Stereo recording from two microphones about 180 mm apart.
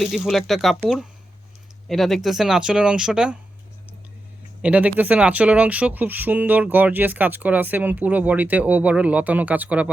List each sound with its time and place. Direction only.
0.0 s speech: centre (ahead or behind)
4.6 s speech: 10° right (ahead or behind)